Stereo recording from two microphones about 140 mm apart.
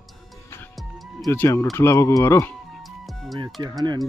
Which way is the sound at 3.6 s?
30° right (ahead or behind).